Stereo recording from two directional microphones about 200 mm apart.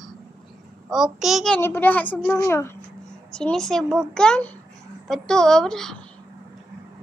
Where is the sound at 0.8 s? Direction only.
Centre (ahead or behind).